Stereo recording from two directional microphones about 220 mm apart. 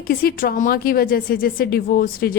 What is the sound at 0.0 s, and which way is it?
Speech, 40° left (ahead or behind).